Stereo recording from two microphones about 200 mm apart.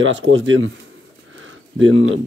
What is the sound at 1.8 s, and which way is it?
Speech, 75° right (ahead or behind).